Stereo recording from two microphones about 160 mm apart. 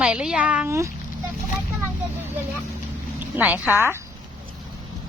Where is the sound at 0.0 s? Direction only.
5° right (ahead or behind).